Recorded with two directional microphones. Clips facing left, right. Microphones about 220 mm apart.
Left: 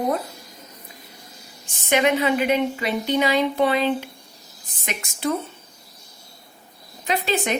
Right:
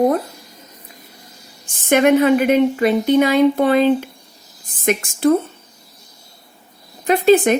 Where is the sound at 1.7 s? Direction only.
50° right (ahead or behind).